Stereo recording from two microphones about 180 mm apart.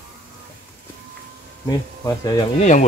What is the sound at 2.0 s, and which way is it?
Speech, 20° left (ahead or behind).